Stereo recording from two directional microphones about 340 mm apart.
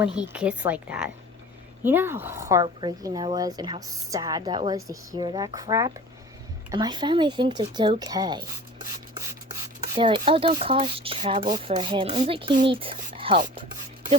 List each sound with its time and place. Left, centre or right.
0.0 s a woman's voice: centre
9.9 s speech: centre